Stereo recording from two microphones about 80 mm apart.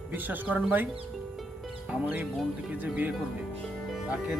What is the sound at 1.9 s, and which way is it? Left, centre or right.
Speech, right.